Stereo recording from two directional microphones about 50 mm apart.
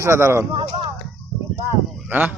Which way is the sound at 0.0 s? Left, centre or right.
Right.